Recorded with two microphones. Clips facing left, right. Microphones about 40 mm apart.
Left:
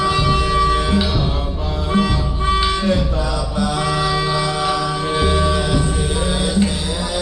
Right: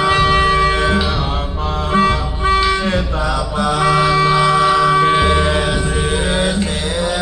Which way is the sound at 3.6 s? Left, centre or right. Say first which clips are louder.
Right 6 dB; right.